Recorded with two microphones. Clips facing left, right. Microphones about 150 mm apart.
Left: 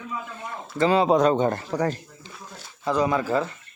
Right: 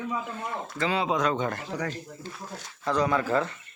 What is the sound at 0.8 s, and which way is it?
Speech, 40° left (ahead or behind).